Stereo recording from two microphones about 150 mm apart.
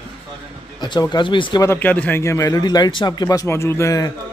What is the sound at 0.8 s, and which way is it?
Speech, 30° left (ahead or behind).